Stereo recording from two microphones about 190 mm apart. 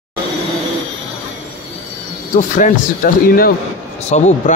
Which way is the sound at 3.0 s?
50° left (ahead or behind).